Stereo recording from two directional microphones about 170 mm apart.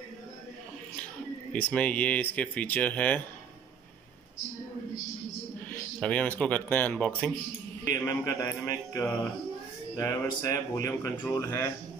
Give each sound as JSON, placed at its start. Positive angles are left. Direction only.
{"t": 1.5, "sound": "speech", "side_deg": 10}
{"t": 5.7, "sound": "speech", "side_deg": 5}